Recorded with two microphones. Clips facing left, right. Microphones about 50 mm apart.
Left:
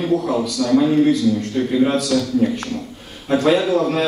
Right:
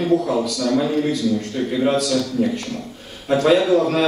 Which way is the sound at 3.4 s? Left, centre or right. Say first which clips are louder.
Right 1 dB; centre.